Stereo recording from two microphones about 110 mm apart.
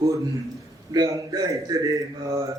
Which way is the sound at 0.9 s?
35° right (ahead or behind).